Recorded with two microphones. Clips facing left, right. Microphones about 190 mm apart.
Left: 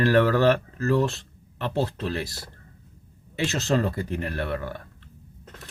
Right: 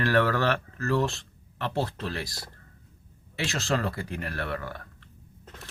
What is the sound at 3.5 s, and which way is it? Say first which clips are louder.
Speech: left 4 dB; 20° left (ahead or behind).